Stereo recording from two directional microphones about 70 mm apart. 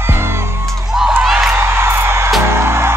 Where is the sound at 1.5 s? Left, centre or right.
Right.